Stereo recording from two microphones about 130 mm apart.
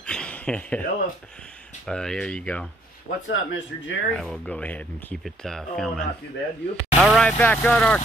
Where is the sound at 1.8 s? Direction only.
5° left (ahead or behind).